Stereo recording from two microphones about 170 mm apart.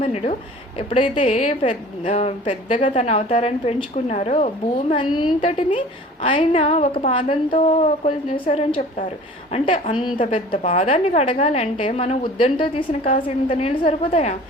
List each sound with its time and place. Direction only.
0.0 s speech: 35° left (ahead or behind)